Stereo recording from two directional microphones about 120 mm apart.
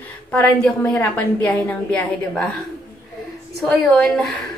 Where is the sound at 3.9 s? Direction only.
Centre (ahead or behind).